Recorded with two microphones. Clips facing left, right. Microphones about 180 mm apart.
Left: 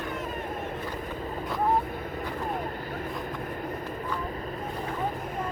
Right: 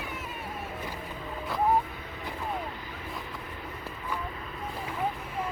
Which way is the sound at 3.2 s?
50° left (ahead or behind).